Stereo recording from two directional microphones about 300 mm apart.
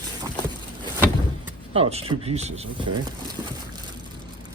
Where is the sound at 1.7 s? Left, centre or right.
Centre.